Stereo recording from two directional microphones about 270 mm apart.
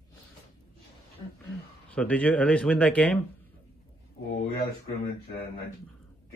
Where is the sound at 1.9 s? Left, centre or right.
Centre.